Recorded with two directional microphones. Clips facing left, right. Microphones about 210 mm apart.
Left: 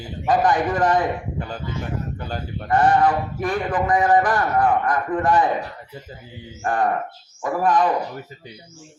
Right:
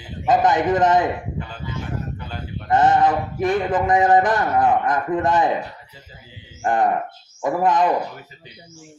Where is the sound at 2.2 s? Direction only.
40° left (ahead or behind).